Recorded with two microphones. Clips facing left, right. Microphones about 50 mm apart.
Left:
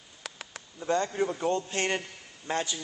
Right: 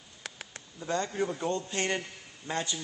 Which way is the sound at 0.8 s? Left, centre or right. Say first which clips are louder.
Left 4 dB; left.